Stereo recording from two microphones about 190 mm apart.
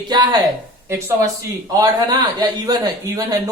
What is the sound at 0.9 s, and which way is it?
A man's voice, 15° right (ahead or behind).